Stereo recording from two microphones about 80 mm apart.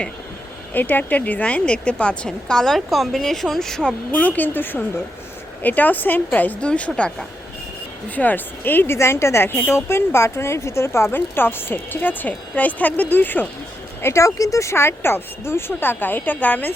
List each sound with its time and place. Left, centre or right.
0.7 s a woman's voice: left; by 3.9 s centre
4.1 s speech: centre
8.1 s speech: left
14.0 s speech: left